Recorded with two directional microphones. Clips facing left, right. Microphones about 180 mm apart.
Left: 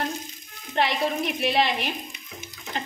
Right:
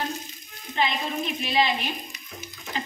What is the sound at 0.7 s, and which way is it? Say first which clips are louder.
Speech: left 3 dB; 70° left (ahead or behind).